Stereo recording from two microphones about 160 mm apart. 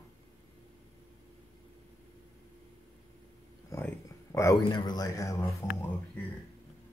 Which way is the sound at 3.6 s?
20° left (ahead or behind).